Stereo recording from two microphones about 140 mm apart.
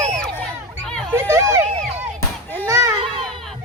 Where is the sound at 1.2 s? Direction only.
20° right (ahead or behind).